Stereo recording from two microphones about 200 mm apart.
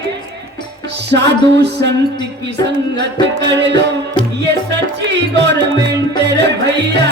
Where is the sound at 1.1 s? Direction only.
60° right (ahead or behind).